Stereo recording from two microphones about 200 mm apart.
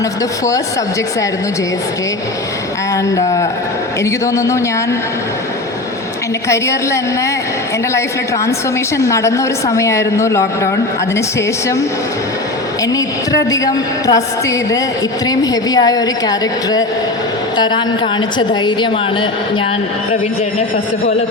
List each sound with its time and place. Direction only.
2.9 s speech: 15° left (ahead or behind)
6.5 s speech: 15° left (ahead or behind)
9.0 s speech: 15° left (ahead or behind)
14.1 s a woman's voice: 15° left (ahead or behind)